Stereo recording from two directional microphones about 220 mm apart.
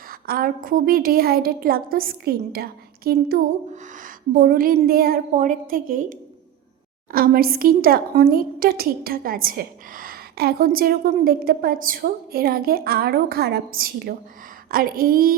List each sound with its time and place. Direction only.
0.1 s a woman's voice: 40° right (ahead or behind)